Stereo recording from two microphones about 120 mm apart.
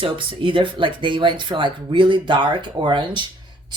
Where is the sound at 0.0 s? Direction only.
45° right (ahead or behind).